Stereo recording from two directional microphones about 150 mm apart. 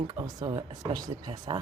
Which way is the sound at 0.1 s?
25° right (ahead or behind).